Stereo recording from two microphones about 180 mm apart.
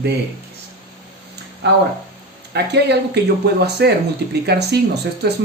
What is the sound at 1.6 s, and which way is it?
Speech, 70° right (ahead or behind).